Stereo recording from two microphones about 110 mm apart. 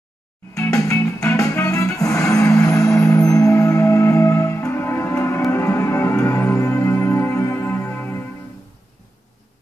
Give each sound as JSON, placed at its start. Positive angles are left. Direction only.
{"t": 0.6, "sound": "music", "side_deg": 30}